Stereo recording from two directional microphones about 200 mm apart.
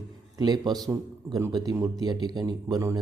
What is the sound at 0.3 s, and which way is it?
Speech, 20° right (ahead or behind).